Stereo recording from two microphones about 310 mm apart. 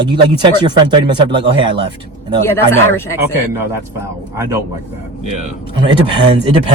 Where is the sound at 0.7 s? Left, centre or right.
Centre.